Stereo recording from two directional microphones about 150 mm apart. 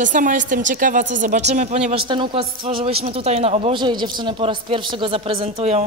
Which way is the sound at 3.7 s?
30° right (ahead or behind).